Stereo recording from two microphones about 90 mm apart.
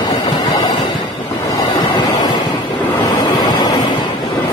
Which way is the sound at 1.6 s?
55° left (ahead or behind).